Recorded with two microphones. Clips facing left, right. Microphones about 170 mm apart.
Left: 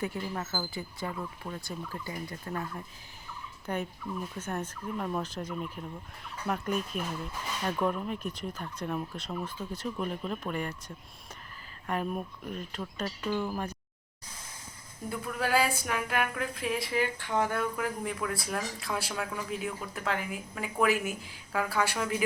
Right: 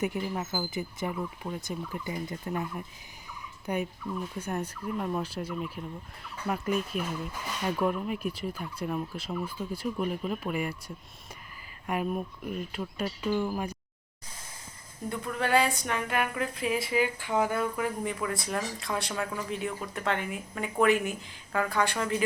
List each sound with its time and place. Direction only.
0.0 s speech: 15° right (ahead or behind)
12.1 s speech: 5° right (ahead or behind)
15.1 s speech: 5° left (ahead or behind)